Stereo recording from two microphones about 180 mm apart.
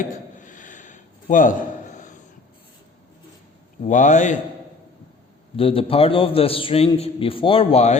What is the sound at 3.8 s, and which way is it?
Speech, 45° left (ahead or behind).